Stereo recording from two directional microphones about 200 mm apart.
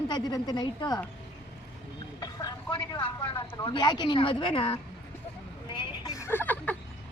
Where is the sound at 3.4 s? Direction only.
25° left (ahead or behind).